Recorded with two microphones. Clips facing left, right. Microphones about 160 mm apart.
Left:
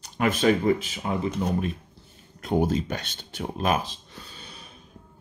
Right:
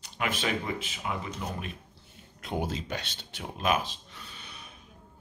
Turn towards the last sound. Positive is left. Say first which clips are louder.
# left 3 dB
turn(degrees=35)  # may be behind; listen again after turning